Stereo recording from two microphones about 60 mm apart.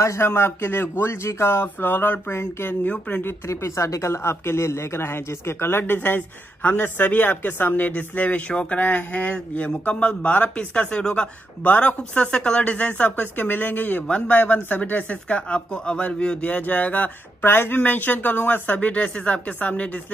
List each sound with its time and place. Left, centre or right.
0.0 s speech: left; by 11.2 s centre
11.6 s speech: left
12.0 s speech: centre
17.5 s speech: left